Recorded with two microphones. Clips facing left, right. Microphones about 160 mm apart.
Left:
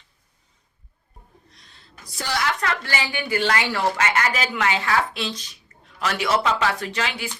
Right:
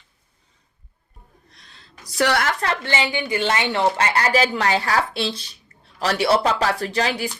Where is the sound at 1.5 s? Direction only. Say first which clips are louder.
Right 3 dB; 85° right; by 2.5 s 65° right (ahead or behind).